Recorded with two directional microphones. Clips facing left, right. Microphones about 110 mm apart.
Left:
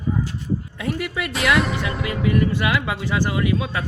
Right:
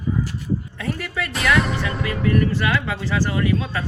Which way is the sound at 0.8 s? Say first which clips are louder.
Left 1 dB; 15° left (ahead or behind).